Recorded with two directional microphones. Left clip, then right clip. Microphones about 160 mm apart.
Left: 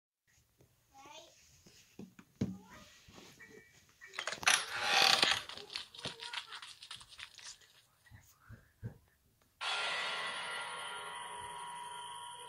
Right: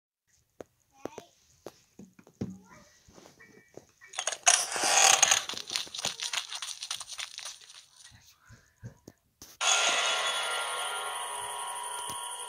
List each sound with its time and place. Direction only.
4.0 s mechanisms: 35° right (ahead or behind)
9.6 s music: 40° right (ahead or behind)